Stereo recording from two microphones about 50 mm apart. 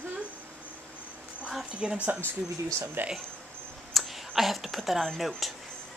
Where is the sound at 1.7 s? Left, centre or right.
Right.